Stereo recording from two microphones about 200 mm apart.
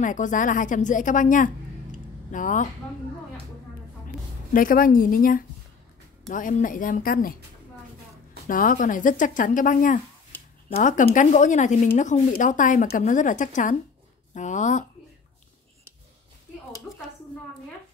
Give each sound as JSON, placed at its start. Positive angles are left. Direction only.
{"t": 0.0, "sound": "speech", "side_deg": 40}
{"t": 4.6, "sound": "a woman's voice", "side_deg": 45}
{"t": 8.5, "sound": "speech", "side_deg": 45}